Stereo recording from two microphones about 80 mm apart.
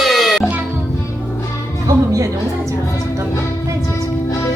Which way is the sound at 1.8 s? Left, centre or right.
Right.